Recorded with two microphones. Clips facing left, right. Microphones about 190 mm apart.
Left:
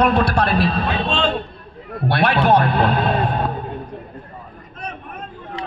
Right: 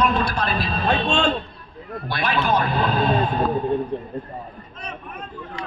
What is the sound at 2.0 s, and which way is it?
Speech, 65° left (ahead or behind).